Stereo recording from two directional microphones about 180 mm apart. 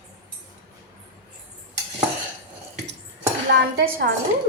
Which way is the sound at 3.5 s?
65° right (ahead or behind).